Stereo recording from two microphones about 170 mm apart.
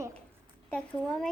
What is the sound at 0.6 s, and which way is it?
Speech, 5° left (ahead or behind).